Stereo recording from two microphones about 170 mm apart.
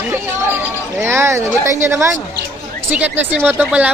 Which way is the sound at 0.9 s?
15° right (ahead or behind).